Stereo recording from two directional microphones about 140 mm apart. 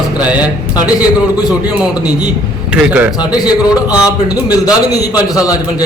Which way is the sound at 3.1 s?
30° left (ahead or behind).